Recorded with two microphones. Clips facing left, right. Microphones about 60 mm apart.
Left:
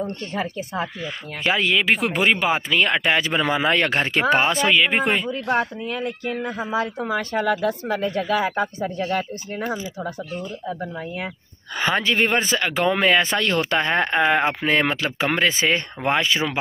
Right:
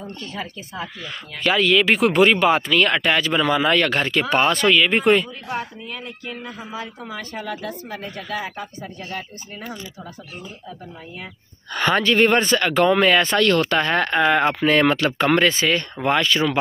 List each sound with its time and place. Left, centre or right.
0.0 s speech: left
1.4 s speech: left
1.9 s speech: centre; by 4.4 s left
4.4 s speech: centre
5.3 s speech: left
11.7 s speech: centre
15.5 s speech: left